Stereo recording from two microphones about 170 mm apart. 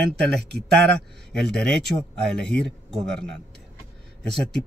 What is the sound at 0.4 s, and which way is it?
Speech, 80° right.